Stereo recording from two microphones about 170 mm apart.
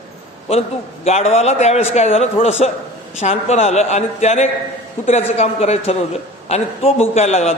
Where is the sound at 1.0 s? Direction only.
40° left (ahead or behind).